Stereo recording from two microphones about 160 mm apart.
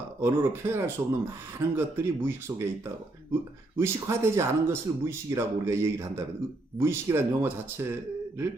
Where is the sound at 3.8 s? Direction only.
15° right (ahead or behind).